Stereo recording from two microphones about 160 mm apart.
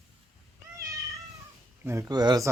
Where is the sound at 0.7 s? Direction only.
20° right (ahead or behind).